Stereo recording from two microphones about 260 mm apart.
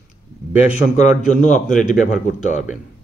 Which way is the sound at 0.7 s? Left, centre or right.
Left.